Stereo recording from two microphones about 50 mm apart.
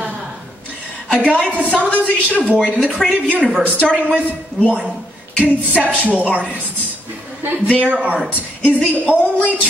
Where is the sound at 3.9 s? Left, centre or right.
Right.